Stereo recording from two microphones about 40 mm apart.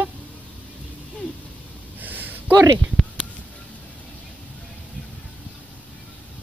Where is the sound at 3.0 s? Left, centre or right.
Centre.